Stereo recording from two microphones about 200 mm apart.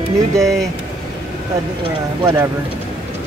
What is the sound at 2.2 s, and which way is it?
Speech, 20° right (ahead or behind).